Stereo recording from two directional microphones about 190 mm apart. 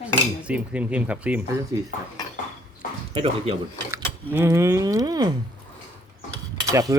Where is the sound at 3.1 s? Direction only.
30° right (ahead or behind).